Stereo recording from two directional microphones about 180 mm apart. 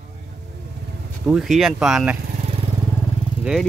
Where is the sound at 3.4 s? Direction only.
Centre (ahead or behind).